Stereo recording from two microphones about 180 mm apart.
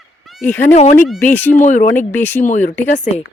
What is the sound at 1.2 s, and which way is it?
Speech, 10° left (ahead or behind).